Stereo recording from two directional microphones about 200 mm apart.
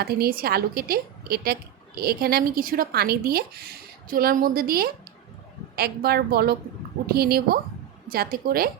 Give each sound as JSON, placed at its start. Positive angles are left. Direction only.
{"t": 0.0, "sound": "speech", "side_deg": -50}